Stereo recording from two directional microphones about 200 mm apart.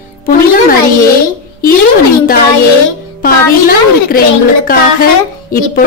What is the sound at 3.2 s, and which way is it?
A woman's voice, 45° left (ahead or behind).